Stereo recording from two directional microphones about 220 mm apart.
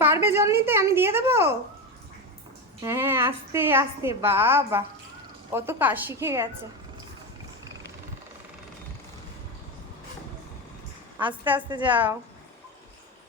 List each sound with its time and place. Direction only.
0.0 s a woman's voice: 10° right (ahead or behind)
2.8 s a woman's voice: 10° right (ahead or behind)
11.2 s a woman's voice: 5° right (ahead or behind)
11.5 s a woman's voice: 20° right (ahead or behind)
11.9 s a woman's voice: 5° right (ahead or behind)